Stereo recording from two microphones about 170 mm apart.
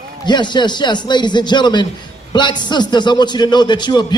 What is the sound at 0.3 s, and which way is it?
A man's voice, 25° left (ahead or behind).